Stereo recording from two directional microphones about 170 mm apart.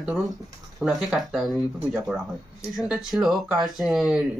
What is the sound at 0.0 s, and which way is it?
Speech, centre (ahead or behind).